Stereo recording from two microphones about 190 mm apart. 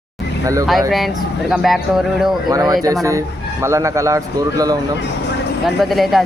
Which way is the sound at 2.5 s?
20° right (ahead or behind).